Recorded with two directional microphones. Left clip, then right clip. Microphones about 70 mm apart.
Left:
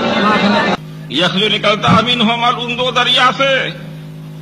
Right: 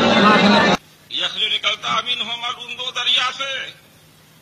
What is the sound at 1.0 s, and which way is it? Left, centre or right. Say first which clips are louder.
A man's voice: left 8 dB; left.